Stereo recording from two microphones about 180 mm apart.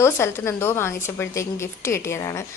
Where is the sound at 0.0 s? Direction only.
15° left (ahead or behind).